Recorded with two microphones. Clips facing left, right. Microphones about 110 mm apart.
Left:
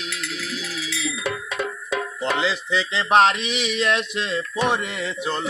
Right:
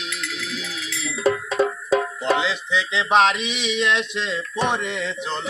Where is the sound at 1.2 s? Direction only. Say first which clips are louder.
Right 11 dB; 35° right (ahead or behind).